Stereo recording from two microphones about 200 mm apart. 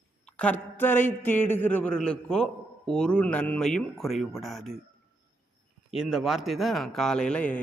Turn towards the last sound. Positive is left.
turn(degrees=5)  # may be behind; listen again after turning